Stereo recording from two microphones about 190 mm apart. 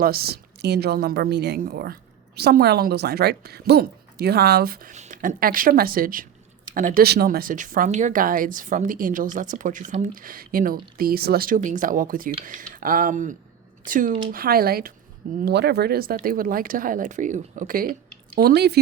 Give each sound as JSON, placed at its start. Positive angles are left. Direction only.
{"t": 0.0, "sound": "a woman's voice", "side_deg": -55}
{"t": 18.3, "sound": "a woman's voice", "side_deg": -55}